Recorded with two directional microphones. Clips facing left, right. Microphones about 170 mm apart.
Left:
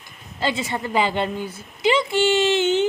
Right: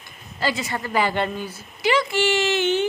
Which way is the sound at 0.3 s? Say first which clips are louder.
Left 1 dB; 25° left (ahead or behind).